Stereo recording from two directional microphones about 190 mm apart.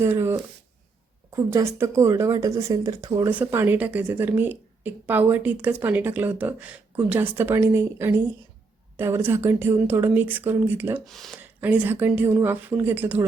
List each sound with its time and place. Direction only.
0.0 s speech: 15° right (ahead or behind)
3.2 s speech: 10° right (ahead or behind)
11.0 s speech: centre (ahead or behind)